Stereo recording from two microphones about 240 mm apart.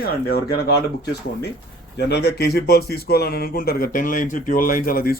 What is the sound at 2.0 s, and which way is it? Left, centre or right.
Speech, left.